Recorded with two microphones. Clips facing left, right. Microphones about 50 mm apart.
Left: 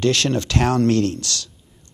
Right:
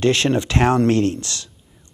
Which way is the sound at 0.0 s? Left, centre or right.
Right.